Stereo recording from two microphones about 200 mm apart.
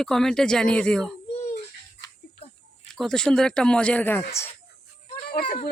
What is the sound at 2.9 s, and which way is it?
Speech, centre (ahead or behind).